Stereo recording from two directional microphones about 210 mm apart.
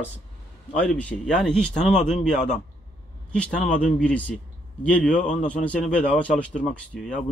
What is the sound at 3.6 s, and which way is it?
Speech, 40° left (ahead or behind).